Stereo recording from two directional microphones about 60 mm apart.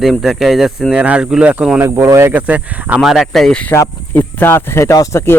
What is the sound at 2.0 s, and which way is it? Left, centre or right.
Speech, right.